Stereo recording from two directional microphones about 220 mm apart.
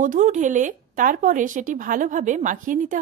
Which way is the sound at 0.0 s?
35° right (ahead or behind).